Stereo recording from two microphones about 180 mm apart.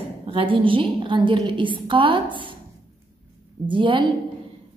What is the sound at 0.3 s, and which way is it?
A woman's voice, 30° right (ahead or behind).